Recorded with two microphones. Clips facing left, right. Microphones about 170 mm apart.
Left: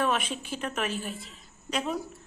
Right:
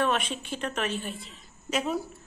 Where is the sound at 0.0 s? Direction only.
5° left (ahead or behind).